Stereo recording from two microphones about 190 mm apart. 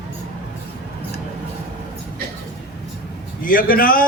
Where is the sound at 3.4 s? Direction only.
45° left (ahead or behind).